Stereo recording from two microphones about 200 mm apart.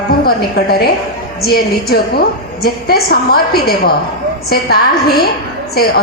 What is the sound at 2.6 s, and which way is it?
A woman's voice, 50° left (ahead or behind).